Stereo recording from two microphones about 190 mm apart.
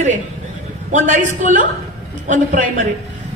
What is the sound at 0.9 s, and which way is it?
A man's voice, 40° right (ahead or behind).